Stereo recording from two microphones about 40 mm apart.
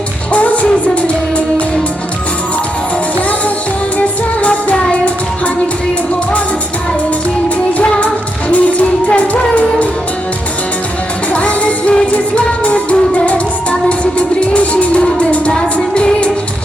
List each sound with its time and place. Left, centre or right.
0.3 s music: left
3.2 s music: left
7.7 s music: left
11.3 s music: left